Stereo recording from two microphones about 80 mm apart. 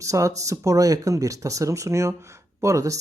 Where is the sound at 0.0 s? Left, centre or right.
Right.